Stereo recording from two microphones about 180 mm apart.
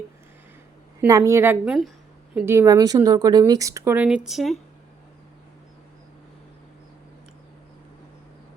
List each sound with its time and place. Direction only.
1.0 s speech: 20° right (ahead or behind); by 4.5 s centre (ahead or behind)